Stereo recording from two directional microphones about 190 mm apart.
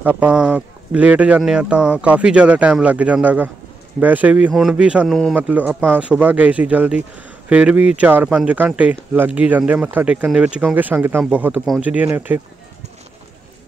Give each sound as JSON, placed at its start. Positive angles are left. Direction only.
{"t": 0.0, "sound": "speech", "side_deg": -10}